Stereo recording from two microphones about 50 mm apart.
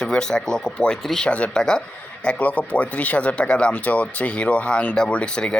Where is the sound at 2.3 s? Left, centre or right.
Left.